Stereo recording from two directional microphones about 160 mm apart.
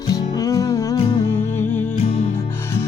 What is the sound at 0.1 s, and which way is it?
Music, 20° left (ahead or behind).